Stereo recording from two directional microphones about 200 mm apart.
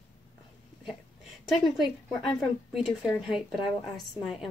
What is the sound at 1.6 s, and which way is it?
A woman's voice, centre (ahead or behind).